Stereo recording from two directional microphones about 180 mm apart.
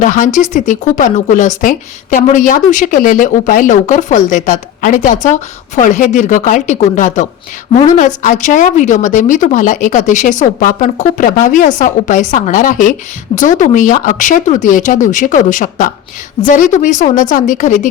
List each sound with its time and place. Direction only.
0.0 s speech: 45° left (ahead or behind)